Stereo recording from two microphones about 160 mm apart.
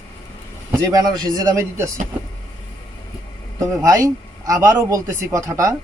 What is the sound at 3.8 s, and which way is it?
A man's voice, 20° right (ahead or behind).